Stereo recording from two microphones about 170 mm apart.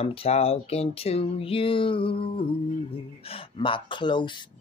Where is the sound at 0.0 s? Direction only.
35° left (ahead or behind).